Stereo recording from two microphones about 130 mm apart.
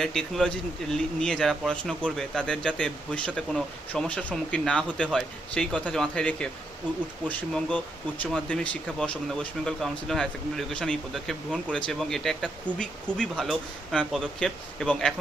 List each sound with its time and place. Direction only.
0.0 s speech: 5° left (ahead or behind)
12.7 s speech: 35° left (ahead or behind)
13.1 s speech: centre (ahead or behind)